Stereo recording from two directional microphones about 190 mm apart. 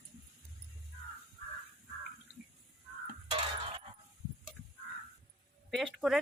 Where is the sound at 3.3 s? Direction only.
30° right (ahead or behind).